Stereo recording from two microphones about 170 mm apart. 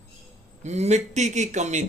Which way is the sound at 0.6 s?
40° right (ahead or behind).